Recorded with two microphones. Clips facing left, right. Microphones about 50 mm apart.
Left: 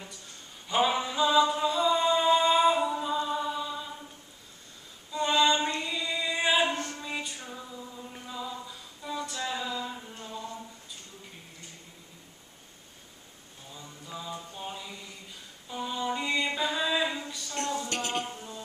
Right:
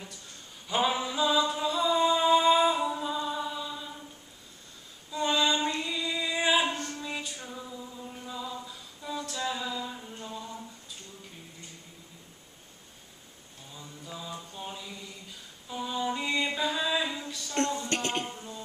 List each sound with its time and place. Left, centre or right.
0.7 s music: centre
5.1 s female singing: centre
6.7 s music: left
7.0 s music: centre
8.3 s a sound: centre
13.7 s mantra: centre
15.7 s music: centre